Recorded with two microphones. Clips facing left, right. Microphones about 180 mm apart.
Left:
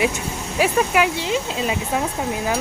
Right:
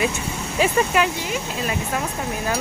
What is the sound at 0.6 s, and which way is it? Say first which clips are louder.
Speech: left 1 dB; 10° left (ahead or behind).